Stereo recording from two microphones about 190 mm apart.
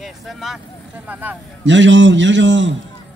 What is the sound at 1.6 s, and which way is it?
Speech, 75° right (ahead or behind).